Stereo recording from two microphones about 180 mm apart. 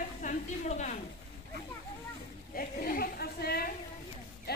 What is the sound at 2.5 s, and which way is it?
A woman's voice, 55° left (ahead or behind).